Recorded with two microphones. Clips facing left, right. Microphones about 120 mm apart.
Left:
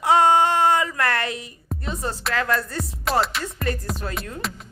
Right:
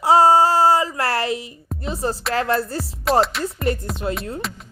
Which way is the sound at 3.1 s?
Centre (ahead or behind).